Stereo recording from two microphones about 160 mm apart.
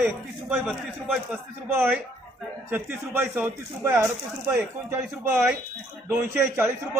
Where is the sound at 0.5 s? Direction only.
5° right (ahead or behind).